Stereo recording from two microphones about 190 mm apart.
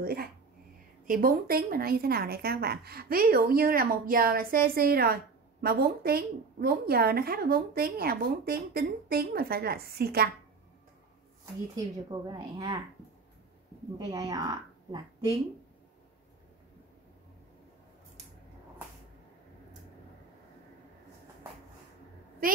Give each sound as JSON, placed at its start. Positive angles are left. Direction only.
{"t": 0.0, "sound": "a woman's voice", "side_deg": -55}
{"t": 11.7, "sound": "speech", "side_deg": -20}
{"t": 13.9, "sound": "speech", "side_deg": -20}
{"t": 22.4, "sound": "a woman's voice", "side_deg": -50}